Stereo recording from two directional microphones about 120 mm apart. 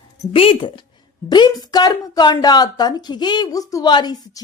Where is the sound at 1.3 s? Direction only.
35° left (ahead or behind).